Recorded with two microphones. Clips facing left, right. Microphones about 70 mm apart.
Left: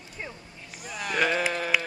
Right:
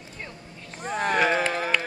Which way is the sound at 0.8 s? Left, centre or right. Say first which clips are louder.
Right 8 dB; right.